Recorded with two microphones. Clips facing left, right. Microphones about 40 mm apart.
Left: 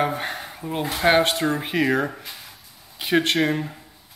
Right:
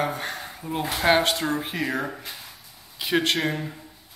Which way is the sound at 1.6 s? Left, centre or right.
Left.